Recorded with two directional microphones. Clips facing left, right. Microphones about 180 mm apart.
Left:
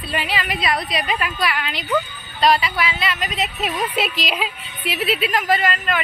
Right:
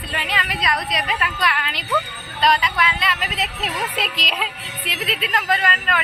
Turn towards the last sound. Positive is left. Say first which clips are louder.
# left 2 dB
turn(degrees=0)  # may be behind; listen again after turning